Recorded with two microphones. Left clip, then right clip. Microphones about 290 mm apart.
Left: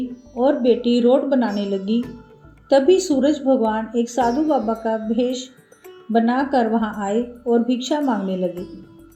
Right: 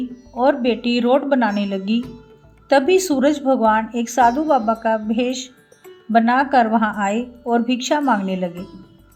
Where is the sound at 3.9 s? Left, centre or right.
Right.